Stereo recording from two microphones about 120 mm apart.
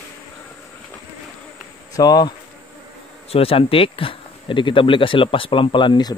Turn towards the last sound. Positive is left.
turn(degrees=40)  # may be behind; listen again after turning